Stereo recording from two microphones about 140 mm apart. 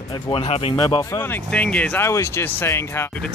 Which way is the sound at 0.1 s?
40° left (ahead or behind).